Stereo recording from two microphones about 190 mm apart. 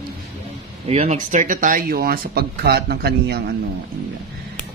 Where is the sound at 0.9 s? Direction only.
35° right (ahead or behind); by 3.6 s 55° right (ahead or behind).